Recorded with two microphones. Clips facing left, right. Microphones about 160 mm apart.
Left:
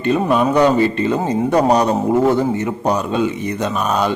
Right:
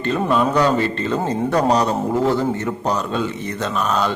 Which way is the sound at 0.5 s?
15° left (ahead or behind).